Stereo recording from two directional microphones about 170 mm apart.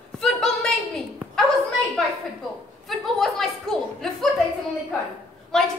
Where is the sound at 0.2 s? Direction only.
5° left (ahead or behind).